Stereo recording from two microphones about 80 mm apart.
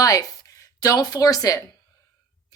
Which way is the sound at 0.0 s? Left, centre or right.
Left.